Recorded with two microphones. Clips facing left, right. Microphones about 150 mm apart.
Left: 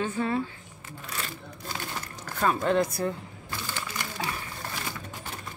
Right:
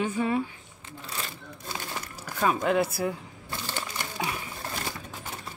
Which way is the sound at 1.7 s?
10° right (ahead or behind).